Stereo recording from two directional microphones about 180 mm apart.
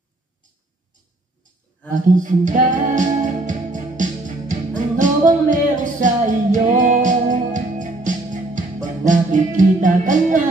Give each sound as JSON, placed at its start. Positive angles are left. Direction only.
{"t": 2.0, "sound": "music", "side_deg": -45}